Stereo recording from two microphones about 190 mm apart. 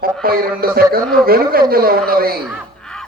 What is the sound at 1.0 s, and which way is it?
Speech, 5° left (ahead or behind).